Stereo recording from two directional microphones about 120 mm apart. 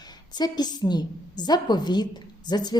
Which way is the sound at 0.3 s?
35° left (ahead or behind).